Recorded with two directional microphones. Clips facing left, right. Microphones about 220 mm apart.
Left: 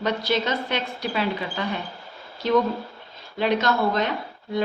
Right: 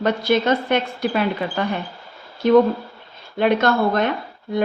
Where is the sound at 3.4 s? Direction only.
55° right (ahead or behind).